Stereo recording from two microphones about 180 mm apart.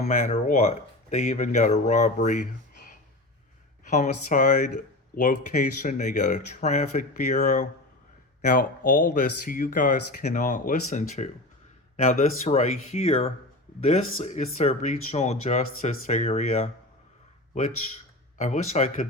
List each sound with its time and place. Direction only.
0.0 s speech: 40° left (ahead or behind)
3.8 s speech: 45° left (ahead or behind)
18.3 s speech: 40° left (ahead or behind)